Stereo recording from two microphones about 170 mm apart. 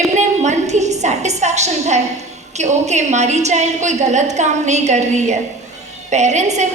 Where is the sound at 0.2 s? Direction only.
40° right (ahead or behind).